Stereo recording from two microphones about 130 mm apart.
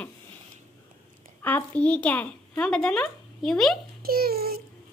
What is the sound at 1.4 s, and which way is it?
A child's voice, 10° left (ahead or behind).